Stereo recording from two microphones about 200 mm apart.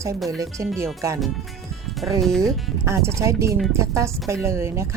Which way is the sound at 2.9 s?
15° right (ahead or behind).